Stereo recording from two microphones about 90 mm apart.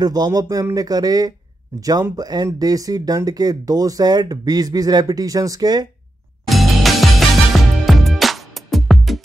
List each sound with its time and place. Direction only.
0.0 s speech: 50° right (ahead or behind)
6.4 s music: centre (ahead or behind)